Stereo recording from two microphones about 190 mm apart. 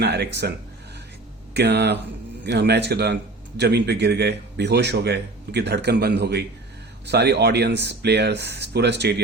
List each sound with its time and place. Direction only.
0.0 s a man's voice: 65° right (ahead or behind)
1.5 s a man's voice: 65° right (ahead or behind)